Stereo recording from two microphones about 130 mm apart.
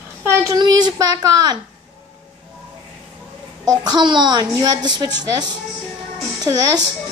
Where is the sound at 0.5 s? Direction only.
35° right (ahead or behind).